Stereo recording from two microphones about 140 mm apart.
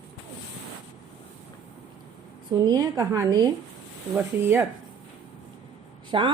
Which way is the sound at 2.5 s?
25° right (ahead or behind).